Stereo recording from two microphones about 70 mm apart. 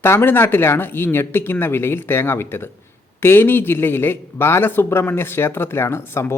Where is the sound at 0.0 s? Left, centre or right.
Left.